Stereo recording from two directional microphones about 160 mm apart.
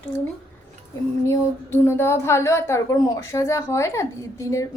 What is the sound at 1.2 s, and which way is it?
A woman's voice, 15° left (ahead or behind).